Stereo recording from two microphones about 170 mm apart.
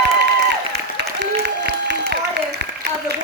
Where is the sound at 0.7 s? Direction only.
80° right.